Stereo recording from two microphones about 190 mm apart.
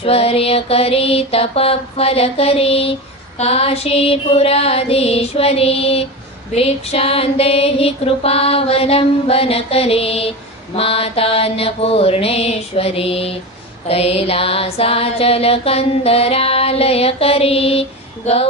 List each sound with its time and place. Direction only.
0.0 s music: 30° left (ahead or behind)